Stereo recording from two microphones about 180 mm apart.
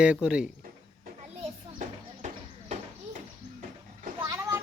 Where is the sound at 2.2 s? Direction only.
45° right (ahead or behind).